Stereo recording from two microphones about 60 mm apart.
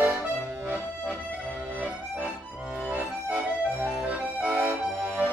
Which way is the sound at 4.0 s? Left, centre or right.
Right.